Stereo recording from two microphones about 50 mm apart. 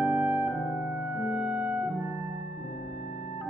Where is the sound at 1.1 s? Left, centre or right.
Right.